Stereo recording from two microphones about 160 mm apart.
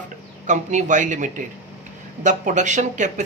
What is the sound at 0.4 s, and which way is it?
Speech, 50° right (ahead or behind).